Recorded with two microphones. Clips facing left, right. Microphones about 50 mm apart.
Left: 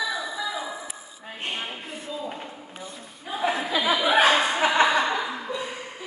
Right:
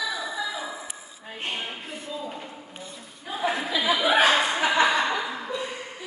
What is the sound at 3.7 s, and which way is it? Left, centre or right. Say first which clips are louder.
Chuckle: left 1 dB; left.